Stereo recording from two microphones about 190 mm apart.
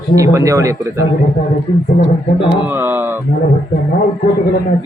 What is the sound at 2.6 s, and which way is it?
Speech, 10° right (ahead or behind).